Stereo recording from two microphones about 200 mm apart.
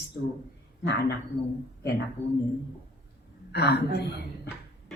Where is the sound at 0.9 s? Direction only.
55° left (ahead or behind).